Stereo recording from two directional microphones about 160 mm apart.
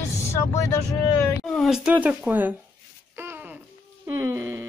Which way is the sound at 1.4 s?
Centre (ahead or behind).